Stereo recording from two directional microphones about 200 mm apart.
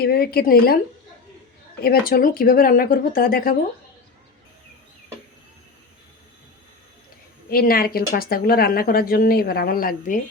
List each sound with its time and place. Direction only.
0.0 s speech: 50° left (ahead or behind)
1.8 s speech: 50° left (ahead or behind)
7.5 s speech: 50° left (ahead or behind)